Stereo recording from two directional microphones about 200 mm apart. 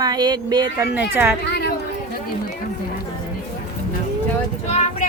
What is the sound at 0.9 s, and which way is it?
Speech, 10° right (ahead or behind).